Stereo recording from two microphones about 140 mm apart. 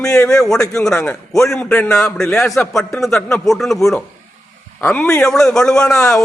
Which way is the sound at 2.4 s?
15° left (ahead or behind).